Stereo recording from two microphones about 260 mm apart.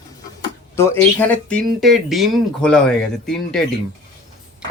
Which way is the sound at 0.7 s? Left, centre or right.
Centre.